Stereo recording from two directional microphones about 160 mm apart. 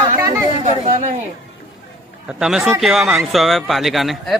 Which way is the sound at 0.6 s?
50° right (ahead or behind).